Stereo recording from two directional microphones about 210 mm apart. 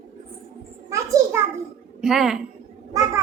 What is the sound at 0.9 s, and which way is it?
Speech, 15° right (ahead or behind).